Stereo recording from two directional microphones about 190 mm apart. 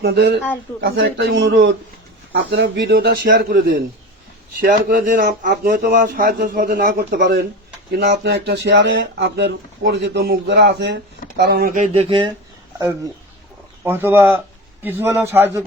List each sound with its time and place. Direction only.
0.0 s speech: 60° right (ahead or behind)
0.9 s speech: 75° right (ahead or behind); by 11.7 s 60° right (ahead or behind)
11.7 s speech: 35° right (ahead or behind)
13.8 s speech: 10° right (ahead or behind)